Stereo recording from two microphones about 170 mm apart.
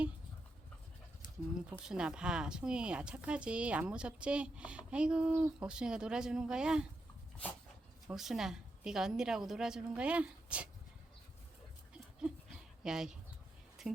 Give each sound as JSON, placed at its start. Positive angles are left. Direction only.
{"t": 1.8, "sound": "a woman's voice", "side_deg": -5}
{"t": 8.0, "sound": "a woman's voice", "side_deg": 0}
{"t": 12.8, "sound": "speech", "side_deg": -5}